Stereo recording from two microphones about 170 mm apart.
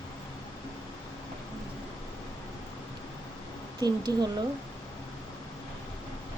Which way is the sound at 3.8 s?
25° right (ahead or behind).